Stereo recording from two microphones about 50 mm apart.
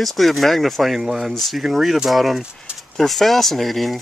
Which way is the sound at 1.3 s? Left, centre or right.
Centre.